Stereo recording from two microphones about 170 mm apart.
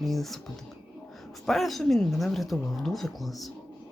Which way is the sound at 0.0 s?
Centre (ahead or behind).